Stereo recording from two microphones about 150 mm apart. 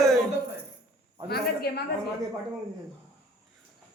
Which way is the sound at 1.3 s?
90° left.